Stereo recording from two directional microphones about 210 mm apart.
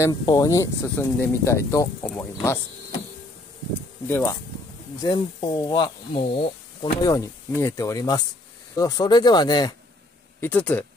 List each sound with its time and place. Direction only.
0.0 s speech: 15° left (ahead or behind)
4.1 s speech: 10° left (ahead or behind)
10.4 s speech: 10° left (ahead or behind)